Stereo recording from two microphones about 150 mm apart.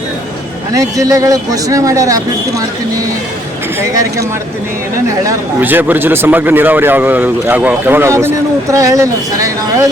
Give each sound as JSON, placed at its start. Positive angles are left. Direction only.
{"t": 0.7, "sound": "speech", "side_deg": -20}
{"t": 3.8, "sound": "speech", "side_deg": -20}